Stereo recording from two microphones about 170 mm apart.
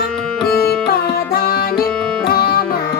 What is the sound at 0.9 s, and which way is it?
Music, 65° left (ahead or behind).